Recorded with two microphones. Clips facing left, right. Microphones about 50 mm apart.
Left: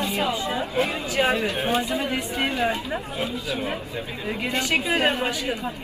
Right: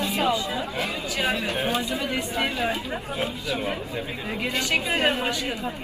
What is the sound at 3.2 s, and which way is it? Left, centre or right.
Speech, right.